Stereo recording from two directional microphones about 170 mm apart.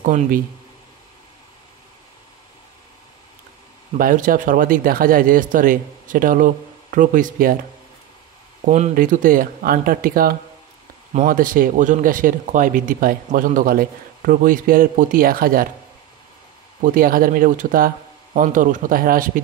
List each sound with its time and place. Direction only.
0.0 s speech: 50° right (ahead or behind)
4.0 s speech: 55° right (ahead or behind)
8.6 s speech: 45° right (ahead or behind)
16.8 s speech: 55° right (ahead or behind)